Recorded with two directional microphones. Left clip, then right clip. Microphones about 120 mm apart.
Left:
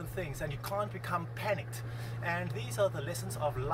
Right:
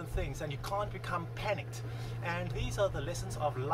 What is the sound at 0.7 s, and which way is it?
Speech, 10° right (ahead or behind).